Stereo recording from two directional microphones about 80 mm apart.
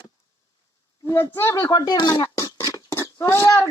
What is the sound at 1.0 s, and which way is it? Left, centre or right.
Speech, left.